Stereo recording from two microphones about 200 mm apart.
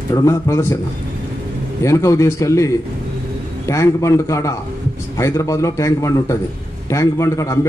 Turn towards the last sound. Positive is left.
turn(degrees=15)  # may be behind; listen again after turning